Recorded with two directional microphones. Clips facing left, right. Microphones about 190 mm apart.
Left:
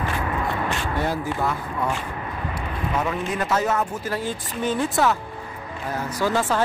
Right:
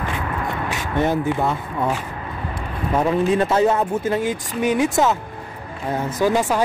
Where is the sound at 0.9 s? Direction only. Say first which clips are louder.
Right 9 dB; 20° right (ahead or behind).